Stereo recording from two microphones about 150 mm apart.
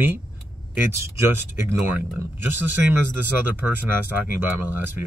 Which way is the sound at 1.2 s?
15° right (ahead or behind).